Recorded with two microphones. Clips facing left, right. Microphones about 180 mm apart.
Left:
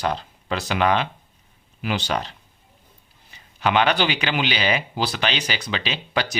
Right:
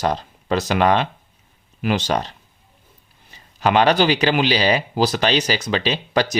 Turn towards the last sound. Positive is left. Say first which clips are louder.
# right 6 dB
turn(degrees=-40)  # may be behind; listen again after turning